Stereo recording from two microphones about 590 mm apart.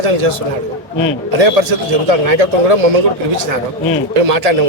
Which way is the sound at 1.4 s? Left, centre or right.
Right.